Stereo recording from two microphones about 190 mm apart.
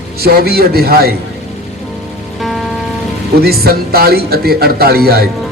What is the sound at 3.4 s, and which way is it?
A man's voice, 55° right (ahead or behind).